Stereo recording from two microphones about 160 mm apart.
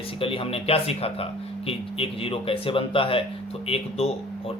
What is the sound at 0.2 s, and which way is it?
Speech, 35° left (ahead or behind).